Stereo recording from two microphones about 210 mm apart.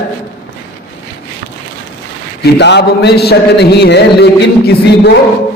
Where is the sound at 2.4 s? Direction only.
55° left (ahead or behind).